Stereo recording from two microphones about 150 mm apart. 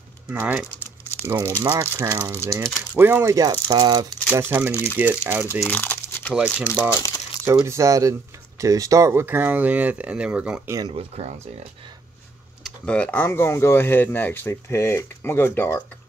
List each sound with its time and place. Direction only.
0.3 s speech: 10° right (ahead or behind); by 4.1 s 25° right (ahead or behind)
4.3 s speech: 15° right (ahead or behind)
5.6 s crumpling: 15° left (ahead or behind)
6.6 s speech: 15° left (ahead or behind)
7.4 s speech: 20° right (ahead or behind)
10.9 s speech: 45° right (ahead or behind)
12.6 s speech: 5° left (ahead or behind)